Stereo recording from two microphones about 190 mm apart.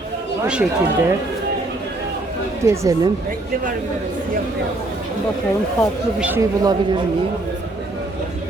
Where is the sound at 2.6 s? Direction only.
15° right (ahead or behind).